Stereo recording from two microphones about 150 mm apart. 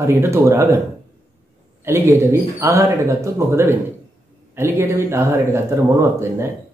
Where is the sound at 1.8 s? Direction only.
15° right (ahead or behind).